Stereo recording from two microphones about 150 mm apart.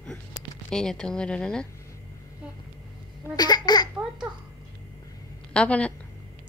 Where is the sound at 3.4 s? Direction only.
25° left (ahead or behind).